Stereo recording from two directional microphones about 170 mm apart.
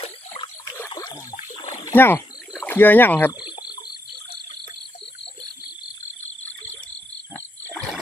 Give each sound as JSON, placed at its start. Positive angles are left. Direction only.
{"t": 0.0, "sound": "a sound", "side_deg": 25}
{"t": 1.7, "sound": "splash", "side_deg": 15}
{"t": 2.6, "sound": "speech", "side_deg": 10}
{"t": 3.4, "sound": "frog", "side_deg": 25}
{"t": 7.3, "sound": "frog", "side_deg": 5}